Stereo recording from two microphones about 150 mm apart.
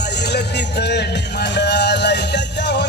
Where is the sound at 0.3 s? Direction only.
90° left.